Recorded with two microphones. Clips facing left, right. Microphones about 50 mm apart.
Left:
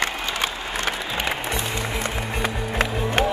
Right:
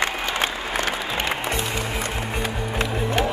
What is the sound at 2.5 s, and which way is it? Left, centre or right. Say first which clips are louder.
Music: even; centre.